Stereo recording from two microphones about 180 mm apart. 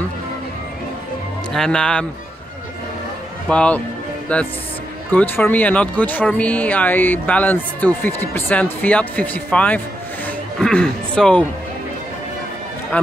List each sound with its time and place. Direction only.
1.5 s speech: 5° left (ahead or behind)
3.4 s speech: 5° left (ahead or behind)
12.9 s run: 10° left (ahead or behind)